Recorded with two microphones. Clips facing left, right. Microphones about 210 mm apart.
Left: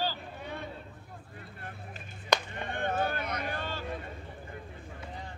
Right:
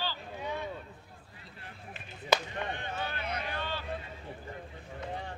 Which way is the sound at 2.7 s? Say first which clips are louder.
Left 6 dB; 55° left (ahead or behind).